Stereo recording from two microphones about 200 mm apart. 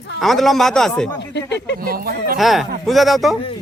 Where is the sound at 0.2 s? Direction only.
Centre (ahead or behind).